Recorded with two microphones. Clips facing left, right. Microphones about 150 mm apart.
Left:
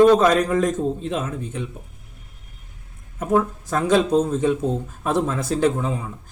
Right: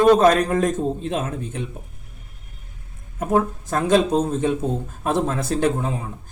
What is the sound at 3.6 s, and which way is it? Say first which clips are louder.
Speech: even; 55° right (ahead or behind).